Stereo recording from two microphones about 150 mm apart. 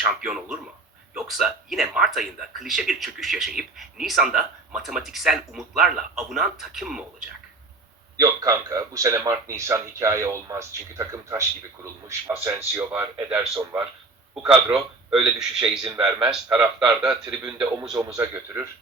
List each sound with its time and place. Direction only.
0.0 s speech: 5° right (ahead or behind)
8.1 s speech: 25° right (ahead or behind); by 15.8 s 5° right (ahead or behind)
15.8 s speech: 35° right (ahead or behind)
16.3 s speech: 5° right (ahead or behind)
17.1 s speech: 25° right (ahead or behind)